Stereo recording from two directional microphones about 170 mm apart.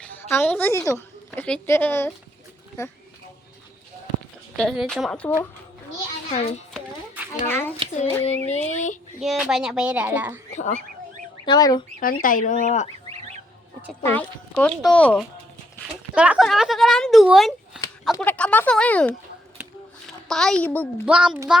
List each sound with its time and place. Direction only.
0.0 s a woman's voice: 10° left (ahead or behind)
4.5 s speech: centre (ahead or behind)
6.3 s a woman's voice: 40° left (ahead or behind)
7.4 s speech: 15° left (ahead or behind)
8.2 s speech: 40° left (ahead or behind)
9.2 s speech: centre (ahead or behind)
11.4 s fowl: 25° left (ahead or behind)
11.9 s speech: 55° left (ahead or behind)
14.0 s speech: 10° left (ahead or behind)
16.1 s speech: 5° right (ahead or behind)
19.6 s a sound: 10° right (ahead or behind)
20.2 s speech: centre (ahead or behind)
21.1 s speech: 5° right (ahead or behind)